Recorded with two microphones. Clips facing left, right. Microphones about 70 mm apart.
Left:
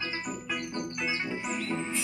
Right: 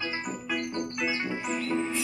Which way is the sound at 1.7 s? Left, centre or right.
Centre.